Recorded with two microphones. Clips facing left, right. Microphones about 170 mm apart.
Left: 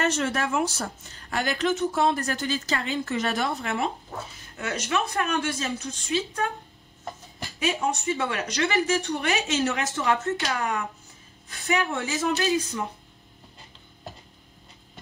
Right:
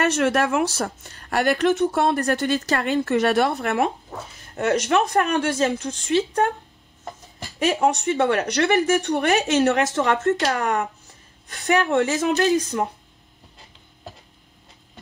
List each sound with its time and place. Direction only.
0.0 s speech: 70° right (ahead or behind); by 6.2 s 85° right
7.5 s speech: 70° right (ahead or behind)